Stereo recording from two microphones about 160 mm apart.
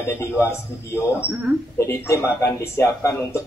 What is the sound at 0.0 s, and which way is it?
Speech, 15° left (ahead or behind).